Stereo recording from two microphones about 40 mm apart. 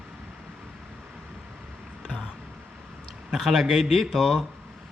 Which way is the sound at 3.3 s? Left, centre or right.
Centre.